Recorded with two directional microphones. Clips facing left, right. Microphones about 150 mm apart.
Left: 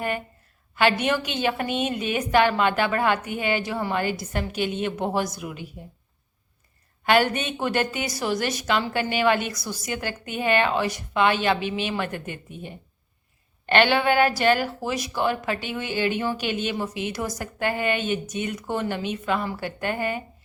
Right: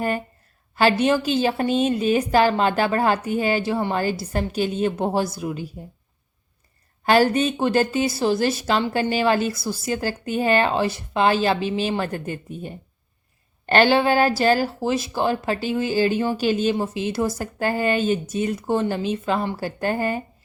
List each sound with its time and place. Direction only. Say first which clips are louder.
0.8 s a woman's voice: right 4 dB; 35° right (ahead or behind)
7.0 s a woman's voice: right 4 dB; 35° right (ahead or behind)